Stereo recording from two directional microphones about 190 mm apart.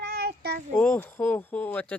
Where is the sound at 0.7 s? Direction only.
10° left (ahead or behind).